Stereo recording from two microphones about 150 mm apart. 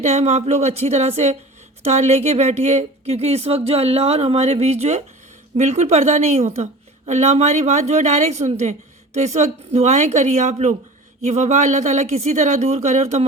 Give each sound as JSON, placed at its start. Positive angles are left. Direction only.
{"t": 0.0, "sound": "speech", "side_deg": -45}